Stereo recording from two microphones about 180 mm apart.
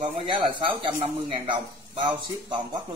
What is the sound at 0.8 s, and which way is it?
A man's voice, 30° right (ahead or behind).